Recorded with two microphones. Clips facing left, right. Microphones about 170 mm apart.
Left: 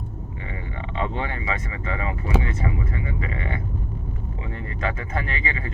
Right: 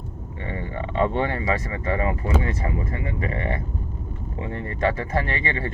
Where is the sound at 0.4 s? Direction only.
35° right (ahead or behind).